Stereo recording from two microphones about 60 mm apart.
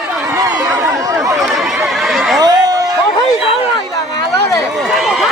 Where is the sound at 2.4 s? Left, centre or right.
Right.